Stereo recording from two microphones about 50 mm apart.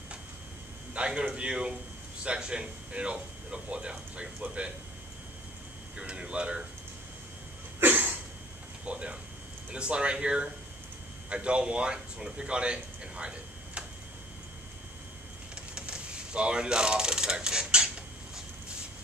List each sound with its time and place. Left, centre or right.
0.9 s speech: right
5.9 s speech: right
7.8 s a sound: right
8.8 s speech: right
15.5 s mechanisms: centre